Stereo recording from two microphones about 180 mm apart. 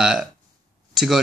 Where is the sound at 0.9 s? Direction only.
Centre (ahead or behind).